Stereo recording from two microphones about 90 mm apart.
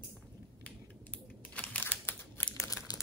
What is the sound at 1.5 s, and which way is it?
Crumpling, 20° left (ahead or behind).